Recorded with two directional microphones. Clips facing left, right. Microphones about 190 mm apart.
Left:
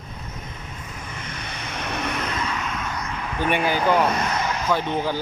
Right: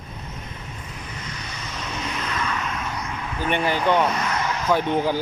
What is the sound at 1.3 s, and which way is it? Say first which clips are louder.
Vehicle: left 1 dB; 55° left (ahead or behind).